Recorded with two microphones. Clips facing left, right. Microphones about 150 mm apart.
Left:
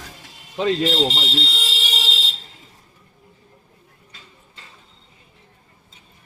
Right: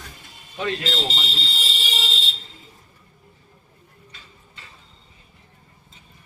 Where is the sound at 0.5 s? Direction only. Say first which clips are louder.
Left 7 dB; 70° left (ahead or behind).